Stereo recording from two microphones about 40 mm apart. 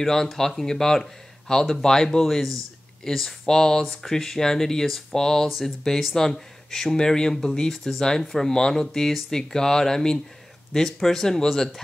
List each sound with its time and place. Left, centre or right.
0.0 s speech: centre
2.2 s speech: centre
3.8 s speech: centre